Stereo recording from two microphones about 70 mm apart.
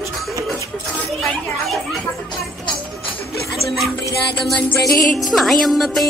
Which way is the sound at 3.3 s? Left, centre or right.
Centre.